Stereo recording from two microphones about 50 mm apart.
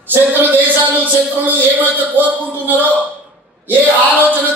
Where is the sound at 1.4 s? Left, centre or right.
Right.